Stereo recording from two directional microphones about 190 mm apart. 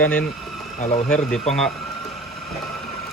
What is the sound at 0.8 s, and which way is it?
Speech, 35° left (ahead or behind).